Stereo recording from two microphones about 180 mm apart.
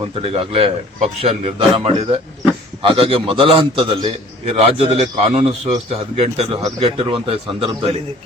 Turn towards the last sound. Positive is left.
turn(degrees=-30)  # may be behind; listen again after turning